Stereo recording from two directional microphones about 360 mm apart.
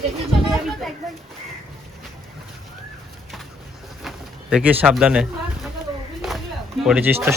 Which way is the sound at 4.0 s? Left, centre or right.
Centre.